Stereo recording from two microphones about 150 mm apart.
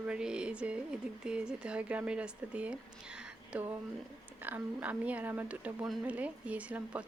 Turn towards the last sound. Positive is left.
turn(degrees=-10)  # may be behind; listen again after turning